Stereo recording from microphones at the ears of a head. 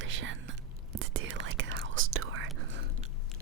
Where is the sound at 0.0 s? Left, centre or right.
Right.